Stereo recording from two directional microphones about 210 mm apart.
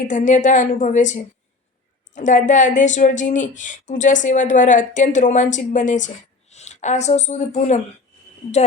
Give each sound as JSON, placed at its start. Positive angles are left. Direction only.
{"t": 0.1, "sound": "a woman's voice", "side_deg": 35}